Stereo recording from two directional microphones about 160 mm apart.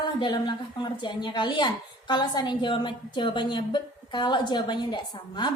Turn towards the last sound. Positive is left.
turn(degrees=30)  # may be behind; listen again after turning